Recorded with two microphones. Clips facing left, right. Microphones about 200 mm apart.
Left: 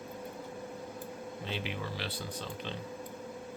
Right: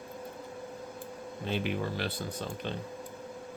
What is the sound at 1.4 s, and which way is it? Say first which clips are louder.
Speech: right 7 dB; 50° right (ahead or behind).